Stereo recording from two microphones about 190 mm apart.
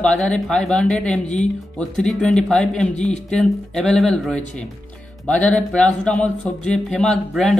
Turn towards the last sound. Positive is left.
turn(degrees=0)  # may be behind; listen again after turning